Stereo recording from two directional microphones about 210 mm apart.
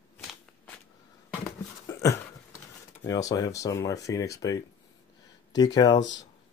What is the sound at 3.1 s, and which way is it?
Speech, 15° left (ahead or behind).